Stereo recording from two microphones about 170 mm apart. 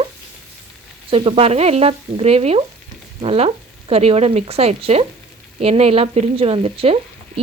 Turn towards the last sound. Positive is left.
turn(degrees=-35)  # may be behind; listen again after turning